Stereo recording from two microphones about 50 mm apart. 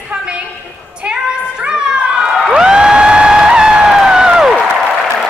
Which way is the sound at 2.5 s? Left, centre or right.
Centre.